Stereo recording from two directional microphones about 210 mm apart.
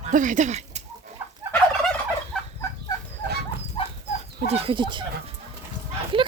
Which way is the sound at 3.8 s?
25° left (ahead or behind).